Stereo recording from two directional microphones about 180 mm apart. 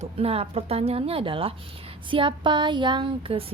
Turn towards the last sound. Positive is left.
turn(degrees=-30)  # may be behind; listen again after turning